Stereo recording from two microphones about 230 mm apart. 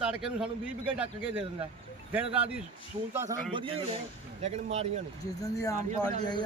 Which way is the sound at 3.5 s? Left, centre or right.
Right.